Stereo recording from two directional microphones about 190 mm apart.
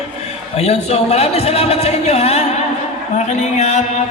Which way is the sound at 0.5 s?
35° left (ahead or behind).